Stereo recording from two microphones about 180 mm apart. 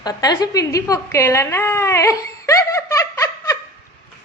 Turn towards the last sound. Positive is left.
turn(degrees=20)  # may be behind; listen again after turning